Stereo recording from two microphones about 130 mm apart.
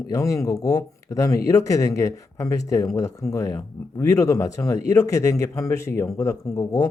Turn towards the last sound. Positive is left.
turn(degrees=25)  # may be behind; listen again after turning